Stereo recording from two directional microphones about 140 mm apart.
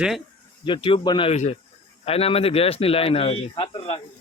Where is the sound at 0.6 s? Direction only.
35° left (ahead or behind).